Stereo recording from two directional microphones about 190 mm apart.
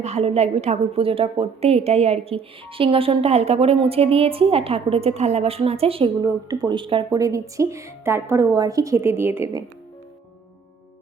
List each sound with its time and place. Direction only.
0.0 s a woman's voice: 35° right (ahead or behind)
6.2 s speech: 20° right (ahead or behind)